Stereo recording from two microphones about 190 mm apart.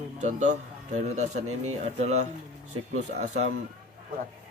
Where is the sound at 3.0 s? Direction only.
40° right (ahead or behind).